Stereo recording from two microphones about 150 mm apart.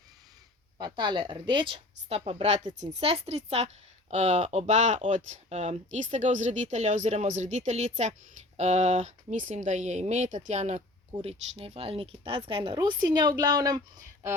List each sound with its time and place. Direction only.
0.8 s speech: 30° right (ahead or behind)